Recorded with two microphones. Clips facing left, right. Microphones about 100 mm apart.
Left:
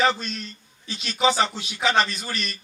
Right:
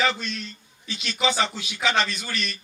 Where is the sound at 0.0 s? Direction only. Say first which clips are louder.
Left 3 dB; 40° left (ahead or behind).